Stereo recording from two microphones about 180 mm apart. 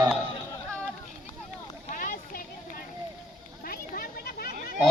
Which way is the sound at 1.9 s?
45° left (ahead or behind).